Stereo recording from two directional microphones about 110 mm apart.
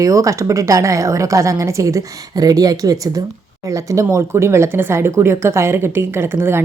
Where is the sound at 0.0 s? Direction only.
30° right (ahead or behind).